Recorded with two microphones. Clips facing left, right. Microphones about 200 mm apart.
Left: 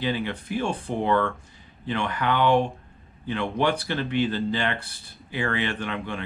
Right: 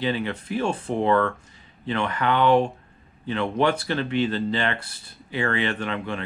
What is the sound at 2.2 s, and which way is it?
Speech, 25° right (ahead or behind).